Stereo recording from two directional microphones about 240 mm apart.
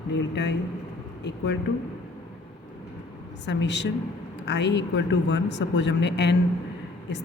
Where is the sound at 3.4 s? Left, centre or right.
Left.